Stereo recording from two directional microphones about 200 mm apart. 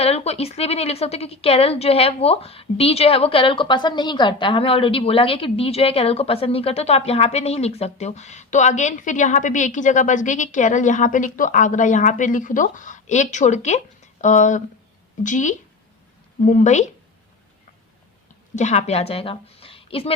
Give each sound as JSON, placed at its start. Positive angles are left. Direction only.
{"t": 0.0, "sound": "a woman's voice", "side_deg": 30}
{"t": 18.5, "sound": "a woman's voice", "side_deg": 35}